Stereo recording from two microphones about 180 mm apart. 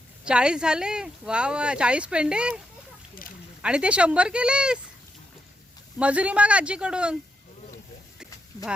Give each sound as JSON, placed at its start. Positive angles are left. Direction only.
{"t": 0.3, "sound": "speech", "side_deg": -5}
{"t": 3.6, "sound": "speech", "side_deg": -5}
{"t": 6.0, "sound": "speech", "side_deg": -5}
{"t": 8.5, "sound": "clip-clop", "side_deg": 15}